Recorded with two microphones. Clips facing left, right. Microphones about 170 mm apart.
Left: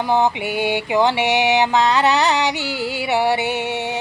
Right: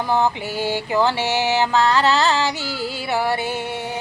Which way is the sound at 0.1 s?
20° left (ahead or behind).